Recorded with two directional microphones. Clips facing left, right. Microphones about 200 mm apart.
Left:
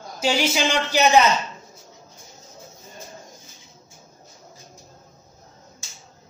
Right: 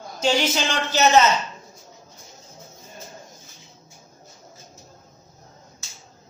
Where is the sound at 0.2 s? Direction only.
10° left (ahead or behind).